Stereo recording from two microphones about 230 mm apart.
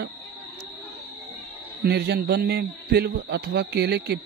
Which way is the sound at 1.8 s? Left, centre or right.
Right.